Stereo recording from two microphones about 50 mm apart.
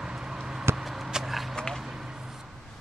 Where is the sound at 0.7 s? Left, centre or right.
Right.